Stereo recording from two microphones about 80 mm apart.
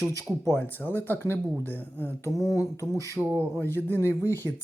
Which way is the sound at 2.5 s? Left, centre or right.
Left.